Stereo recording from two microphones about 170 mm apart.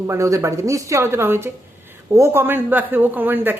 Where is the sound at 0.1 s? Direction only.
15° right (ahead or behind).